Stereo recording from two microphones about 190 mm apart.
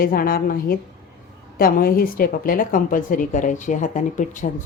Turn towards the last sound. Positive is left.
turn(degrees=40)  # may be behind; listen again after turning